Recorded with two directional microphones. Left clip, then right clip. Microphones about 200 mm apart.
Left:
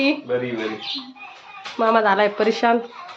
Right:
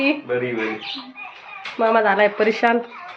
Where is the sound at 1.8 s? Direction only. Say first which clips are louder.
Right 1 dB; 5° left (ahead or behind).